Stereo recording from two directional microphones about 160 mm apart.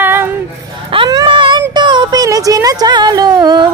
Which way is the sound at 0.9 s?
30° right (ahead or behind).